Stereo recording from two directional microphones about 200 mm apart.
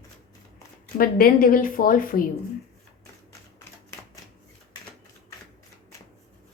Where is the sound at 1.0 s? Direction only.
45° left (ahead or behind).